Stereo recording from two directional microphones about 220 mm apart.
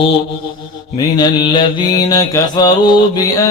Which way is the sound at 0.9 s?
20° left (ahead or behind).